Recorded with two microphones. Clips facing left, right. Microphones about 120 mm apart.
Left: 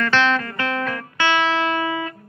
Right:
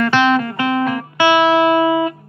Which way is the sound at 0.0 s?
15° right (ahead or behind).